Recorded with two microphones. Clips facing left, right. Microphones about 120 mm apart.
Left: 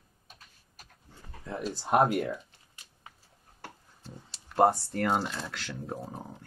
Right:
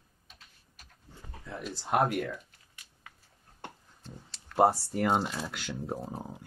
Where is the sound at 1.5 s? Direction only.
35° left (ahead or behind).